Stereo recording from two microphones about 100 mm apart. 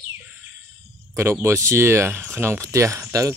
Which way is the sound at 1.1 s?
25° right (ahead or behind).